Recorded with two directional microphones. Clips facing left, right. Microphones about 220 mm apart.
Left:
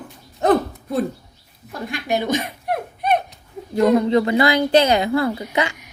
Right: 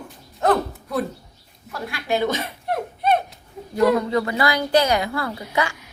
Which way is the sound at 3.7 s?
20° left (ahead or behind).